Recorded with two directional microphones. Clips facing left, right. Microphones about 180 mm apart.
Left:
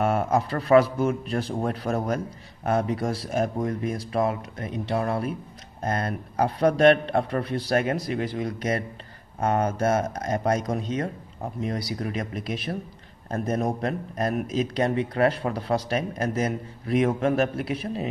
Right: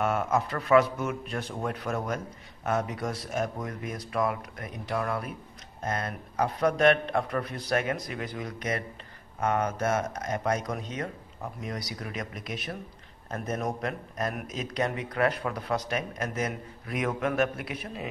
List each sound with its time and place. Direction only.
0.0 s a man's voice: 35° left (ahead or behind)